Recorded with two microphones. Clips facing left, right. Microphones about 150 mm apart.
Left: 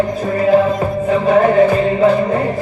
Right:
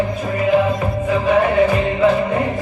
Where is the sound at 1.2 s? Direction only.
35° left (ahead or behind).